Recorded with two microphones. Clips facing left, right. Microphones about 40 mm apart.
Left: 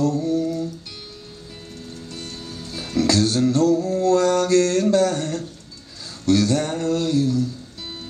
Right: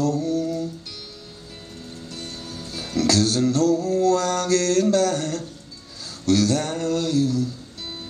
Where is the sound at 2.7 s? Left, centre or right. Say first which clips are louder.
Left 1 dB; centre.